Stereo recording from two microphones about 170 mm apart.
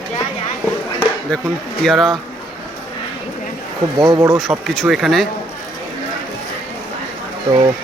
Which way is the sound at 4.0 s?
20° right (ahead or behind).